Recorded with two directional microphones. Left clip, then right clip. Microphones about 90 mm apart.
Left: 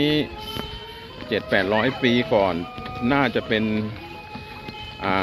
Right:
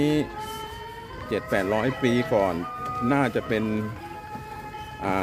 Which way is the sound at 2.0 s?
25° right (ahead or behind).